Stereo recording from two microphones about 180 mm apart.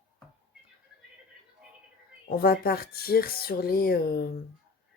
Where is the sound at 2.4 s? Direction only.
55° left (ahead or behind).